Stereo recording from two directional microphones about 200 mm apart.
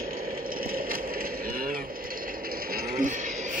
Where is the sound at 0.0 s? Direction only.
45° right (ahead or behind).